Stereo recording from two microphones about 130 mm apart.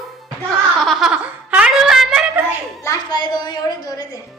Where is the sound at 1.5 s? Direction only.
10° right (ahead or behind).